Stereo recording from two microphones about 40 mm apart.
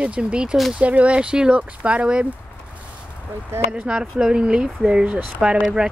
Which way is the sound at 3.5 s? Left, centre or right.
Right.